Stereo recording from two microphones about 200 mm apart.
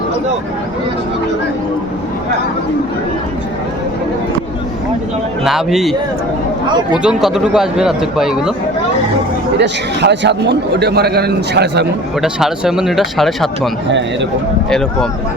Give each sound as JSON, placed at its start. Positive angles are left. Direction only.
{"t": 5.5, "sound": "a man's voice", "side_deg": 0}
{"t": 7.0, "sound": "a man's voice", "side_deg": -5}
{"t": 9.6, "sound": "a man's voice", "side_deg": -60}
{"t": 12.2, "sound": "a man's voice", "side_deg": 0}